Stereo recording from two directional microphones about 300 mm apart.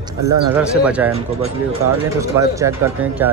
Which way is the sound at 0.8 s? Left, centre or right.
Centre.